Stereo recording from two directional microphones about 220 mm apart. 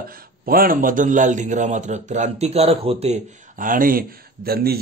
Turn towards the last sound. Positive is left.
turn(degrees=-45)  # may be behind; listen again after turning